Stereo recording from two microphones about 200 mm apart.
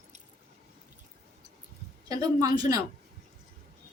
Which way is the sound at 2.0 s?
20° right (ahead or behind).